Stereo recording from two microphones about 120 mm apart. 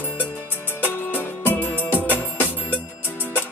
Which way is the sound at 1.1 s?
15° left (ahead or behind).